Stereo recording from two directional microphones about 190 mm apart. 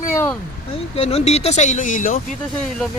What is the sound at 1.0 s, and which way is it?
Speech, 30° left (ahead or behind).